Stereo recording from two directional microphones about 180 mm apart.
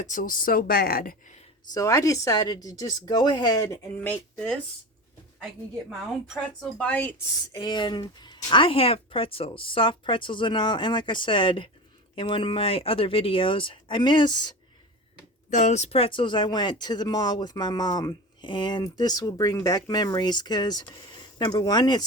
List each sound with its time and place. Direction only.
0.0 s a woman's voice: 45° left (ahead or behind)
1.7 s speech: 20° left (ahead or behind)
6.2 s speech: centre (ahead or behind)
7.5 s speech: 25° left (ahead or behind)
15.4 s speech: 45° left (ahead or behind); by 22.0 s 25° left (ahead or behind)